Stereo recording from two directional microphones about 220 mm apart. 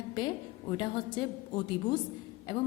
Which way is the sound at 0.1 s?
20° left (ahead or behind).